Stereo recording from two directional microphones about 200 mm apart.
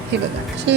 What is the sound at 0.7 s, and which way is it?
Speech, 60° right (ahead or behind).